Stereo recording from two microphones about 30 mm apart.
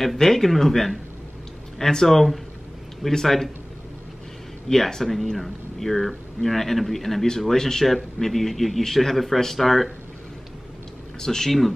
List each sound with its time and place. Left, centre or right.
0.2 s speech: centre
2.0 s speech: centre
4.6 s speech: centre
7.8 s speech: centre
11.1 s speech: centre